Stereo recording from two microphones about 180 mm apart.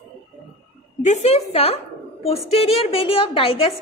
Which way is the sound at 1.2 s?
35° left (ahead or behind).